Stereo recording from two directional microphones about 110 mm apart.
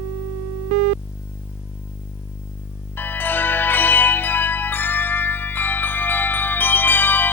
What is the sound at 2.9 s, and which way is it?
Music, 15° left (ahead or behind).